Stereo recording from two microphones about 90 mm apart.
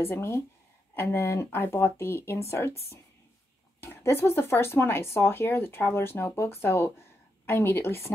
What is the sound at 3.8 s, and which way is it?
Speech, 30° left (ahead or behind).